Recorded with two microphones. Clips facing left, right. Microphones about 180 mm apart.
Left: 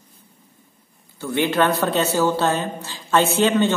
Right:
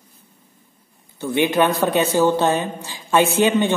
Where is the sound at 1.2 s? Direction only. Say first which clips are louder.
Right 2 dB; 15° right (ahead or behind).